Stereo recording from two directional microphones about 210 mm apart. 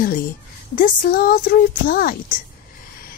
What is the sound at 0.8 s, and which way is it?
A woman's voice, 45° left (ahead or behind).